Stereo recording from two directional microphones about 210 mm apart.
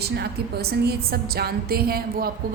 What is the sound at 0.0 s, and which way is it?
A woman's voice, 50° right (ahead or behind).